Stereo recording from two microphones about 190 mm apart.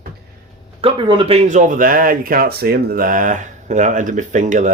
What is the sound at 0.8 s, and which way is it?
Speech, 25° right (ahead or behind).